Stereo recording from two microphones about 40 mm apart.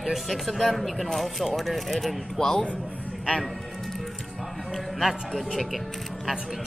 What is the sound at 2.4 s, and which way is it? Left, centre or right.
Speech, centre.